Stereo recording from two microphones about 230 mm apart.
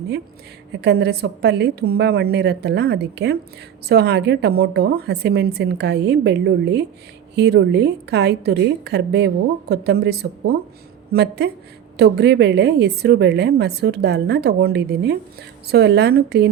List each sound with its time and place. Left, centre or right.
0.7 s a woman's voice: right